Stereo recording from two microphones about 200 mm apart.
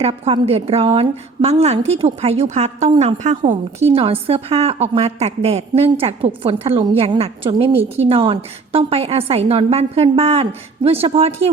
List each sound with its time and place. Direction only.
0.0 s a woman's voice: 30° right (ahead or behind)